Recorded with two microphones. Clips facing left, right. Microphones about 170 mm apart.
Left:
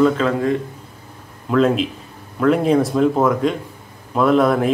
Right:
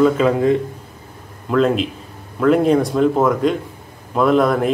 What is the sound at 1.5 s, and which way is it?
Speech, centre (ahead or behind).